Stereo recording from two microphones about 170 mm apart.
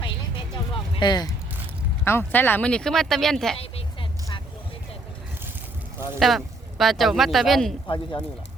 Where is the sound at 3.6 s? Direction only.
35° left (ahead or behind).